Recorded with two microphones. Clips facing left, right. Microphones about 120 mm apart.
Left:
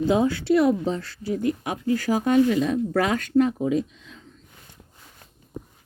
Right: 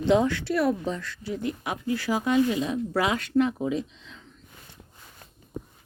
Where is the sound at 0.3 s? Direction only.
25° left (ahead or behind); by 4.2 s 45° left (ahead or behind).